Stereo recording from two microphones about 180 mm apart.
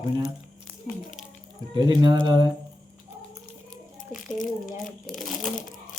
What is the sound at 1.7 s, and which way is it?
Speech, 20° right (ahead or behind).